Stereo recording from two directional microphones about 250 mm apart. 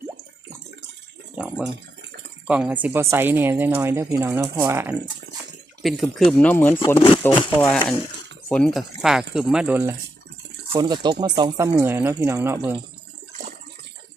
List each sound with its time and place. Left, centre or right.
1.4 s speech: centre
8.4 s speech: centre